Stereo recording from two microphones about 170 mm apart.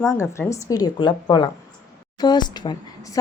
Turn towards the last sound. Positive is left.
turn(degrees=25)  # may be behind; listen again after turning